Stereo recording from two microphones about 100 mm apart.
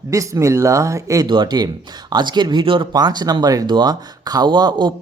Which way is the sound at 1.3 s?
45° right (ahead or behind).